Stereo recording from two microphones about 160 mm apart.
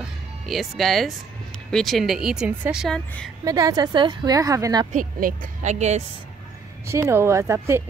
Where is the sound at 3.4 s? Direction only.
25° right (ahead or behind).